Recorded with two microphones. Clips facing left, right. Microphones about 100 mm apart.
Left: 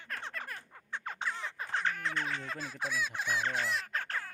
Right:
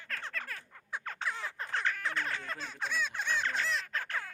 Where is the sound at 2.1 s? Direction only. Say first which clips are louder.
Even; centre (ahead or behind).